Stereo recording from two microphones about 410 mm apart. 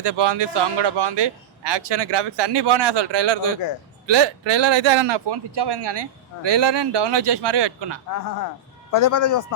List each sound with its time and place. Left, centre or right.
0.0 s a man's voice: right
8.9 s speech: left